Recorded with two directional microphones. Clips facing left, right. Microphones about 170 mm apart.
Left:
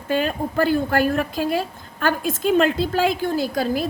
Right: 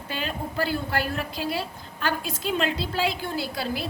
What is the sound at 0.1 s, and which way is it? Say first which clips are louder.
A woman's voice: left 10 dB; 50° left (ahead or behind).